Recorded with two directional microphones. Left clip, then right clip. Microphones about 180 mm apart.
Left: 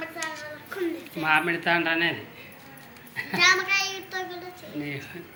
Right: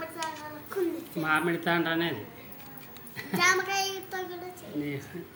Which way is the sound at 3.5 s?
60° right (ahead or behind).